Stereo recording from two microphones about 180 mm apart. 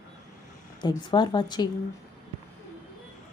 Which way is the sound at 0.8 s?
25° left (ahead or behind).